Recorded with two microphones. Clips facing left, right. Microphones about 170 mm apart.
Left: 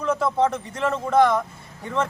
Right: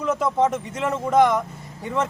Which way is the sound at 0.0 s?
20° right (ahead or behind).